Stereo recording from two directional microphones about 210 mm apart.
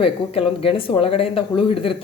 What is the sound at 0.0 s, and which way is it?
Speech, 25° left (ahead or behind).